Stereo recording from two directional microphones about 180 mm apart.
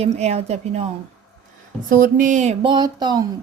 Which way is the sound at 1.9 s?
45° right (ahead or behind).